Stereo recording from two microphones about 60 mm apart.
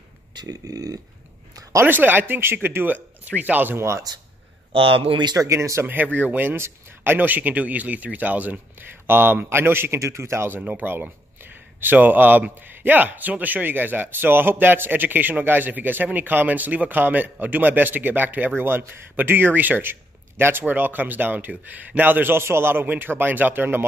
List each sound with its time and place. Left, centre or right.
0.5 s a sound: right
1.9 s a man's voice: right
4.1 s a sound: right
5.5 s speech: right
5.9 s a man's voice: right
9.0 s a man's voice: right
9.9 s speech: right
10.6 s a man's voice: right